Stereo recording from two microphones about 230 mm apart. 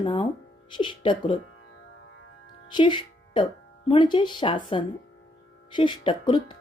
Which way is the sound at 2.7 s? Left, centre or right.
Left.